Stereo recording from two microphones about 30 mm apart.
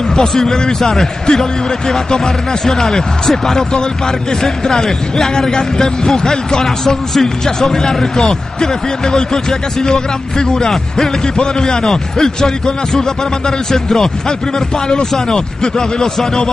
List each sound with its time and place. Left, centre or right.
0.3 s a man's voice: centre
15.1 s a man's voice: left